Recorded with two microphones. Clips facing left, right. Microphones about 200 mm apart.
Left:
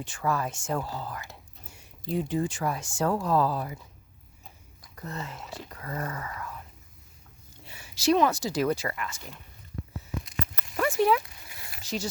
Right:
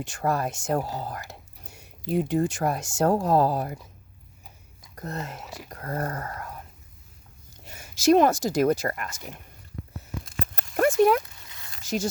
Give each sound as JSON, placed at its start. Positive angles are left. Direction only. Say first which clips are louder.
{"t": 0.0, "sound": "speech", "louder": "right 3 dB", "side_deg": -45}
{"t": 4.9, "sound": "speech", "louder": "right 3 dB", "side_deg": -45}
{"t": 7.6, "sound": "speech", "louder": "right 5 dB", "side_deg": -45}
{"t": 10.4, "sound": "a sound", "louder": "right 6 dB", "side_deg": -45}